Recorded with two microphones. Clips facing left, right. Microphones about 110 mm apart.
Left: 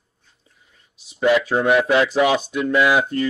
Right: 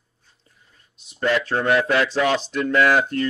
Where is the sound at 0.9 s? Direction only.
Centre (ahead or behind).